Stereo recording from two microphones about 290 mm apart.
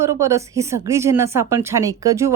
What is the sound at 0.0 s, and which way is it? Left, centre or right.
Speech, centre.